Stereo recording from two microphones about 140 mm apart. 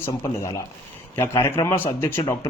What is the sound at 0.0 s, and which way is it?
Speech, 20° left (ahead or behind).